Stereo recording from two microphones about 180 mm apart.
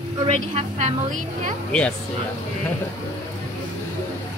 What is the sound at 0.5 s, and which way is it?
Speech, 40° right (ahead or behind).